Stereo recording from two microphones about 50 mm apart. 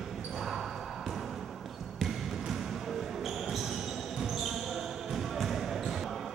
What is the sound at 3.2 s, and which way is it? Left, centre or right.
Basketball bounce, centre.